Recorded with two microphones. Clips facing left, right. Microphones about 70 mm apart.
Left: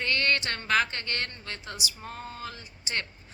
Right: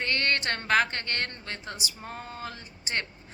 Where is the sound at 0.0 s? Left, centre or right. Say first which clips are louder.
Even; right.